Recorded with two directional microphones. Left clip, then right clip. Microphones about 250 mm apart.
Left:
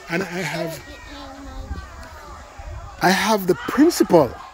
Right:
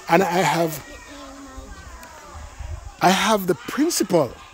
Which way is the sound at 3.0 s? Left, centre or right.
Centre.